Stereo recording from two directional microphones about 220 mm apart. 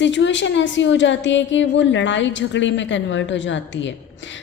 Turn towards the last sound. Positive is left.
turn(degrees=55)  # may be behind; listen again after turning